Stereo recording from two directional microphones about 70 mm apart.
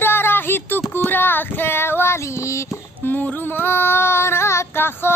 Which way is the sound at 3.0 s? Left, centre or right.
Left.